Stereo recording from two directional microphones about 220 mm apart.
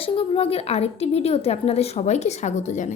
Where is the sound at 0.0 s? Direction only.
25° left (ahead or behind).